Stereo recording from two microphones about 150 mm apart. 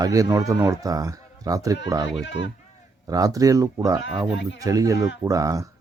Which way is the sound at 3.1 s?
25° right (ahead or behind).